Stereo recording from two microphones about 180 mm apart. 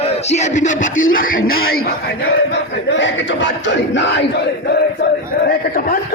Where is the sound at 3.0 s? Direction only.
85° left.